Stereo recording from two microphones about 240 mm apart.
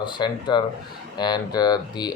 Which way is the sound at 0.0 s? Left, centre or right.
Centre.